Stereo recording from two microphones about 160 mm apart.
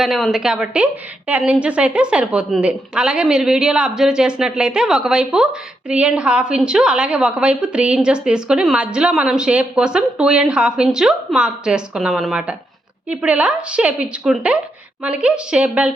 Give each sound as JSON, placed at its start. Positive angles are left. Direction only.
{"t": 0.0, "sound": "a woman's voice", "side_deg": 0}